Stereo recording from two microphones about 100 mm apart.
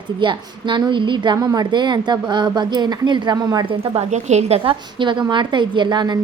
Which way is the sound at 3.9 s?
90° right.